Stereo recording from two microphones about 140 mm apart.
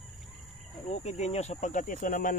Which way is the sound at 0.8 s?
55° left (ahead or behind).